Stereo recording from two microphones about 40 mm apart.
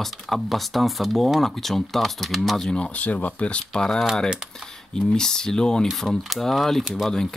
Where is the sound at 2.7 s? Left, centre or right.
Left.